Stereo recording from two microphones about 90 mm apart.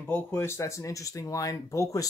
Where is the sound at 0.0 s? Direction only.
25° left (ahead or behind).